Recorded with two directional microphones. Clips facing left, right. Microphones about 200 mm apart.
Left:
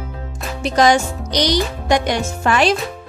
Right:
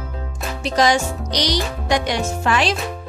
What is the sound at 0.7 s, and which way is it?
Speech, 50° left (ahead or behind).